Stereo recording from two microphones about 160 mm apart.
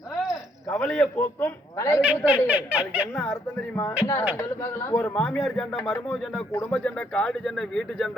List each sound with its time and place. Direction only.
0.7 s a man's voice: 10° left (ahead or behind)
2.5 s speech: 10° right (ahead or behind)
3.8 s a man's voice: 20° left (ahead or behind); by 6.4 s centre (ahead or behind)
6.5 s a man's voice: 20° left (ahead or behind)
6.7 s speech: 5° left (ahead or behind)